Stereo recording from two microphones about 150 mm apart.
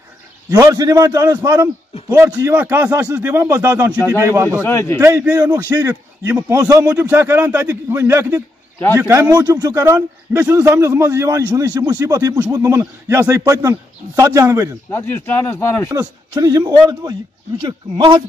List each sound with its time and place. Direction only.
0.5 s a man's voice: 25° right (ahead or behind)
4.0 s speech: 15° left (ahead or behind)
4.3 s a man's voice: 20° right (ahead or behind)
4.6 s speech: 15° left (ahead or behind)
5.3 s a man's voice: 20° right (ahead or behind)
14.9 s speech: 15° left (ahead or behind)
15.9 s a man's voice: 25° right (ahead or behind)